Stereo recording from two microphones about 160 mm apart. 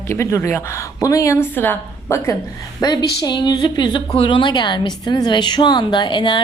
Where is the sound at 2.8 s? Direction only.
25° left (ahead or behind).